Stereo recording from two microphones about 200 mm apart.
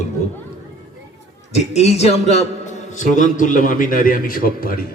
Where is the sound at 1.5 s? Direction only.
30° left (ahead or behind).